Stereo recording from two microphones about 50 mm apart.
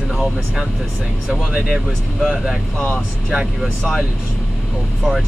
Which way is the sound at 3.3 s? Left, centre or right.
Centre.